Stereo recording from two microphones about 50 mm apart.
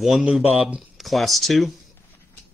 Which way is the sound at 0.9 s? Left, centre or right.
Centre.